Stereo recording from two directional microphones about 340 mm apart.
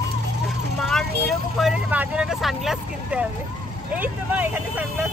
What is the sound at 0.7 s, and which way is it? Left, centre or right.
Vehicle, centre.